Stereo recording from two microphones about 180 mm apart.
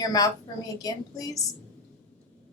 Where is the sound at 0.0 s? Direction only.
20° left (ahead or behind).